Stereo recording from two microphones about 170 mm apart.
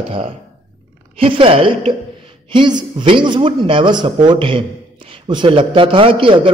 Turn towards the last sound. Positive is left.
turn(degrees=-30)  # may be behind; listen again after turning